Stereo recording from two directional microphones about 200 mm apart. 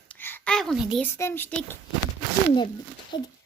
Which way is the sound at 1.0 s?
10° left (ahead or behind).